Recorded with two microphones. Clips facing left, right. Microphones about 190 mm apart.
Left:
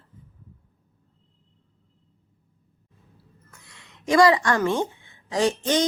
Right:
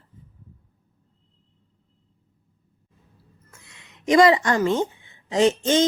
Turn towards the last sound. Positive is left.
turn(degrees=-25)  # may be behind; listen again after turning